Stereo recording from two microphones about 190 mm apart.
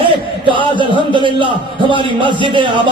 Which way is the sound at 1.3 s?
25° left (ahead or behind).